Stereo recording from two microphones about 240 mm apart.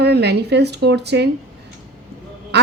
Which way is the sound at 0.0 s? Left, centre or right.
Right.